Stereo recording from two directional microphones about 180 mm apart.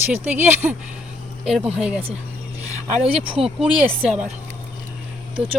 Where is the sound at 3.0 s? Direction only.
30° right (ahead or behind).